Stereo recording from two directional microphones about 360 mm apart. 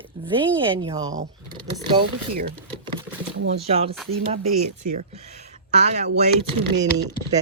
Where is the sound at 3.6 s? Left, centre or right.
Centre.